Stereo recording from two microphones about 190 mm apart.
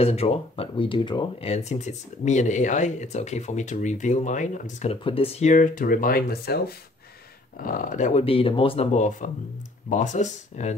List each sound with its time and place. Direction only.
0.0 s speech: 30° left (ahead or behind)